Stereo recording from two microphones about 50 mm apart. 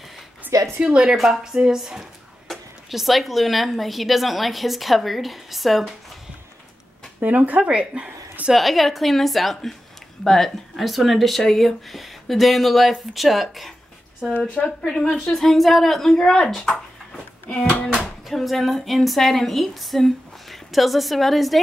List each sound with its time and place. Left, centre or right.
0.5 s a sound: right
1.1 s a woman's voice: centre
7.2 s a woman's voice: right
8.5 s a woman's voice: centre
14.5 s speech: left
14.9 s speech: centre
18.0 s speech: centre